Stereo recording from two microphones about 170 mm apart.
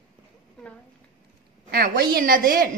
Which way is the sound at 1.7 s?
60° right (ahead or behind).